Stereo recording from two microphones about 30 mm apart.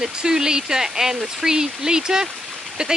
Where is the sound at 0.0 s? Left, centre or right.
Right.